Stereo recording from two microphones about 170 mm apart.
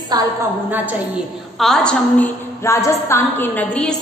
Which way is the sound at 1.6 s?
5° left (ahead or behind).